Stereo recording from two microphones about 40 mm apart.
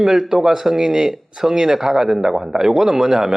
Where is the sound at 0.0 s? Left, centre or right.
Centre.